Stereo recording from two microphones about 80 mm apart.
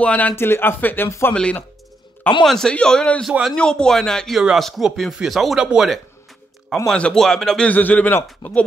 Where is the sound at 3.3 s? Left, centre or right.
Centre.